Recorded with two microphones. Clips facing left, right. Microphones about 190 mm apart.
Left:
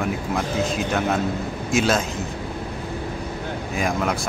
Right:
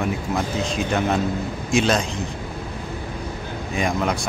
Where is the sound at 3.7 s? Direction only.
Centre (ahead or behind).